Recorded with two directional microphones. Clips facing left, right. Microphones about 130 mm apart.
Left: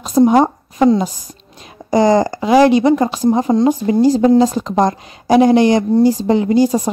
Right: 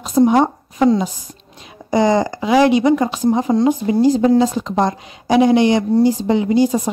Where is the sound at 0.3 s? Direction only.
40° left (ahead or behind).